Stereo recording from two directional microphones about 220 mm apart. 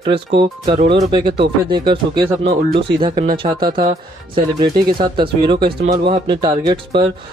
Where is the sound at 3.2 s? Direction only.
45° right (ahead or behind).